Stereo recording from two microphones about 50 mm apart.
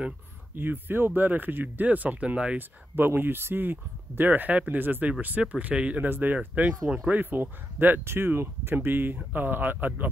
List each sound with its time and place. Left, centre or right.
0.6 s speech: right
3.2 s speech: right
5.4 s speech: right
6.0 s speech: right